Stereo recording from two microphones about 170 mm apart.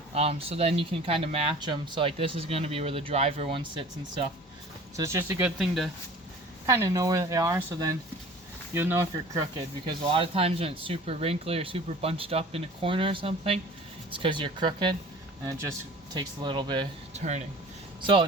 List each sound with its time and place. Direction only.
0.1 s speech: 35° right (ahead or behind)
4.9 s speech: 20° right (ahead or behind)
5.5 s speech: centre (ahead or behind)
6.7 s speech: 20° right (ahead or behind)
16.1 s speech: 25° right (ahead or behind)
17.2 s speech: 45° right (ahead or behind)
18.0 s speech: 30° right (ahead or behind)